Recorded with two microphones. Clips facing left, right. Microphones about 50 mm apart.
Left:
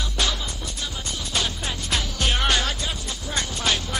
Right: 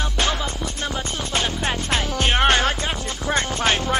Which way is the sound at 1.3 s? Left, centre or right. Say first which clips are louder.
Right 4 dB; right.